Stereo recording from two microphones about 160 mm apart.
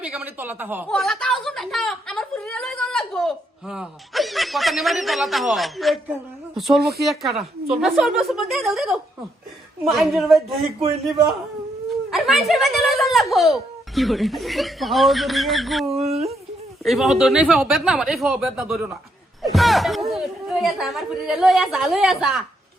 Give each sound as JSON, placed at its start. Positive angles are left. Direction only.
{"t": 0.0, "sound": "speech", "side_deg": -5}
{"t": 0.9, "sound": "a sound", "side_deg": 0}
{"t": 6.1, "sound": "speech", "side_deg": 0}
{"t": 12.1, "sound": "speech", "side_deg": 0}
{"t": 16.0, "sound": "speech", "side_deg": -40}
{"t": 16.8, "sound": "speech", "side_deg": 0}